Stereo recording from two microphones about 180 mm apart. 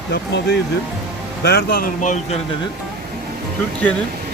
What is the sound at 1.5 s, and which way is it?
Speech, 60° left (ahead or behind).